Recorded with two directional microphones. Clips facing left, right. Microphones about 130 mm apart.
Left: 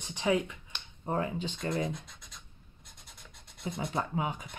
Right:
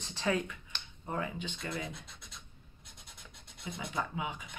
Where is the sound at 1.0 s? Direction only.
35° left (ahead or behind).